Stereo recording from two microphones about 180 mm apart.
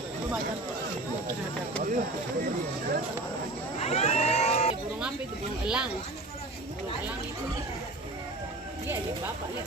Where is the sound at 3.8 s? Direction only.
35° left (ahead or behind).